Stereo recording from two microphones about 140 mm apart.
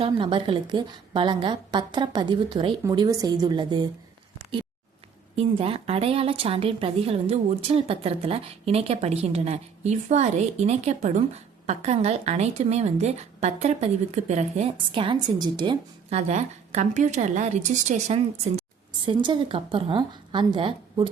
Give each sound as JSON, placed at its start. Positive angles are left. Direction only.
{"t": 0.0, "sound": "a woman's voice", "side_deg": -35}
{"t": 5.4, "sound": "speech", "side_deg": -45}
{"t": 16.0, "sound": "speech", "side_deg": -50}
{"t": 19.0, "sound": "a woman's voice", "side_deg": -35}